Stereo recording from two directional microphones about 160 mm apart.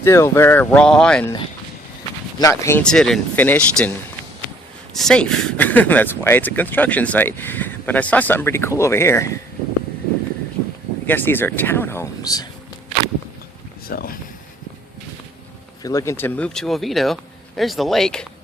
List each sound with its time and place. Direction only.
0.0 s speech: 15° left (ahead or behind)
2.4 s speech: 20° left (ahead or behind)
2.8 s speech: 5° left (ahead or behind)
4.9 s speech: 5° left (ahead or behind)
11.0 s speech: 10° left (ahead or behind)
13.8 s speech: 65° left (ahead or behind)
15.8 s speech: 20° left (ahead or behind); by 18.3 s 5° left (ahead or behind)